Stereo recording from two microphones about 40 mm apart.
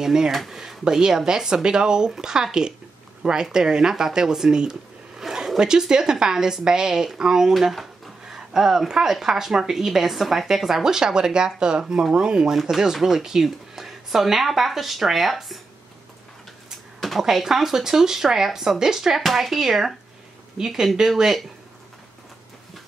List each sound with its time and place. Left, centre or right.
0.0 s speech: centre
0.3 s speech: centre
0.6 s speech: centre
12.7 s speech: centre
17.2 s speech: centre
19.2 s speech: centre